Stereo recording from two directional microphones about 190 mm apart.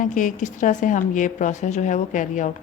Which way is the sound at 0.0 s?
45° left (ahead or behind).